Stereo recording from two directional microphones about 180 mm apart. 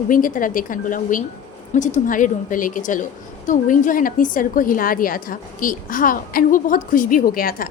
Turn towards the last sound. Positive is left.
turn(degrees=55)  # may be behind; listen again after turning